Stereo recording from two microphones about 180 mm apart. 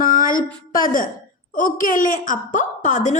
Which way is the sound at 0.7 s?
50° left (ahead or behind).